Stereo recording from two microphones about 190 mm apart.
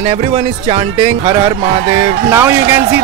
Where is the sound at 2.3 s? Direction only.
15° right (ahead or behind).